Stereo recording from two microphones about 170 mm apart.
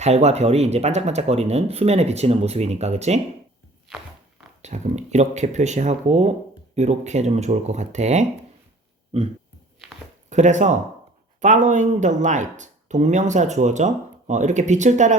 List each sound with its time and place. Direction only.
0.0 s speech: 40° right (ahead or behind)
3.8 s walk: centre (ahead or behind)
4.6 s speech: 45° right (ahead or behind)